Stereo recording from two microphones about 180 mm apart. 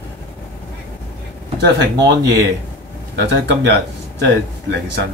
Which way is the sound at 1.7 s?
70° right (ahead or behind).